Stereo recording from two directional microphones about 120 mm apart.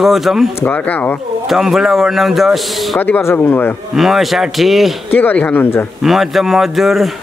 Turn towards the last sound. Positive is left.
turn(degrees=0)  # may be behind; listen again after turning